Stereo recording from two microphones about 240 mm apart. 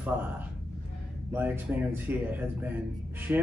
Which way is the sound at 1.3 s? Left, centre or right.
Centre.